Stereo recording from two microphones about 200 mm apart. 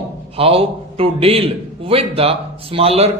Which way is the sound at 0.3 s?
30° right (ahead or behind).